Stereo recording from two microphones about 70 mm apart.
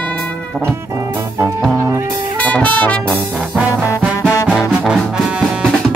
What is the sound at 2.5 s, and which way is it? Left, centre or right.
Music, left.